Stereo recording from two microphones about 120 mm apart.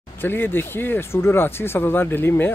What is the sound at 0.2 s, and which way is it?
Speech, 20° left (ahead or behind).